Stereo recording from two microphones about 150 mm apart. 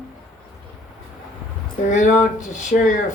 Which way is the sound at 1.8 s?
55° left (ahead or behind).